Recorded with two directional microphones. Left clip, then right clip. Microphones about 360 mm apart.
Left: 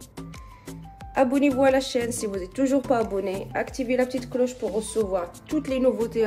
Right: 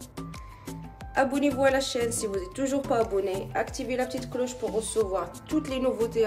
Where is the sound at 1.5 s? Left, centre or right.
Centre.